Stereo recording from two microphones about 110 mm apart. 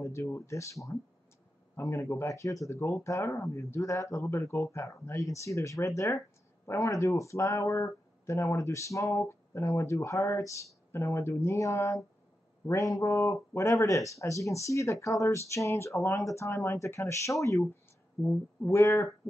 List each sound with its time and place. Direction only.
0.0 s speech: 25° left (ahead or behind)
18.2 s speech: 20° left (ahead or behind)